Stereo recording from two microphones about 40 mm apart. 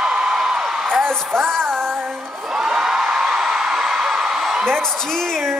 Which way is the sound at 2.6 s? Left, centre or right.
Centre.